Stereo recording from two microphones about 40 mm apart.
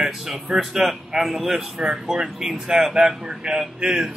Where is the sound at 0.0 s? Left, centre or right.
Centre.